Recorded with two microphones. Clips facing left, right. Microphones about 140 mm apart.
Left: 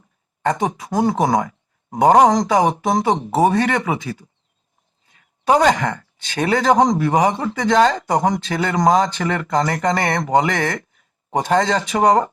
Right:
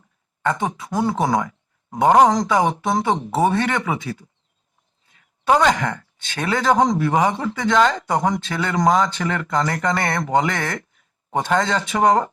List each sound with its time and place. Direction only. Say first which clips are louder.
0.4 s speech: left 2 dB; 40° left (ahead or behind)
5.1 s speech: left 2 dB; 40° left (ahead or behind)